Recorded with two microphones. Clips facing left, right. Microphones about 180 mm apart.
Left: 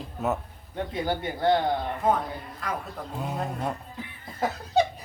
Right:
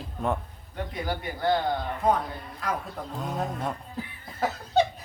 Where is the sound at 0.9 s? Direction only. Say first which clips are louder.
Left 4 dB; 25° left (ahead or behind).